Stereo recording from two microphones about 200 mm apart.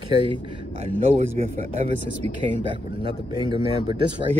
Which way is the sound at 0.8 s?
30° right (ahead or behind).